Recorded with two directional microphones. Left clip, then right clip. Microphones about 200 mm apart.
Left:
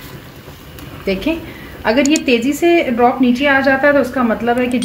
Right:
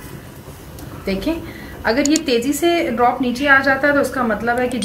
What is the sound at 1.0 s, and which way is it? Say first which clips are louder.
A woman's voice: left 4 dB; 45° left (ahead or behind).